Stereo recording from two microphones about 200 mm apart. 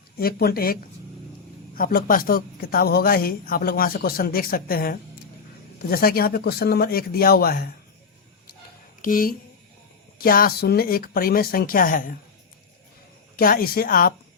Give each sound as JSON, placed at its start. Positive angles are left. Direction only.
{"t": 0.2, "sound": "a woman's voice", "side_deg": 50}
{"t": 9.0, "sound": "a woman's voice", "side_deg": 45}
{"t": 13.3, "sound": "a woman's voice", "side_deg": 45}